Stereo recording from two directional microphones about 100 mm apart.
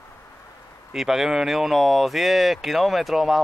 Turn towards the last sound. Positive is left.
turn(degrees=-5)  # may be behind; listen again after turning